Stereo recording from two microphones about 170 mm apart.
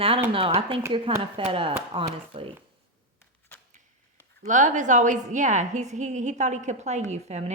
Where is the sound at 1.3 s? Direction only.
35° right (ahead or behind).